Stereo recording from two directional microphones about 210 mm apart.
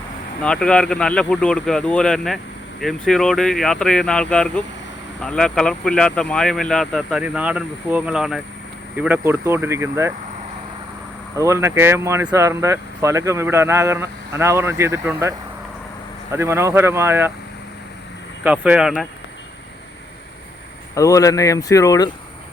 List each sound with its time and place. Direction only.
0.4 s speech: 5° left (ahead or behind); by 10.1 s 15° right (ahead or behind)
11.3 s speech: 15° right (ahead or behind)
18.4 s speech: 5° right (ahead or behind)
20.9 s speech: 15° left (ahead or behind)